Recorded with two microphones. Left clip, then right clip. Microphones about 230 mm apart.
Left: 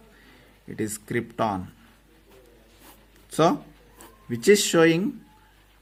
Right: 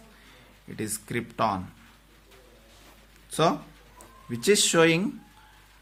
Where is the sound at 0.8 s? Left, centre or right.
Left.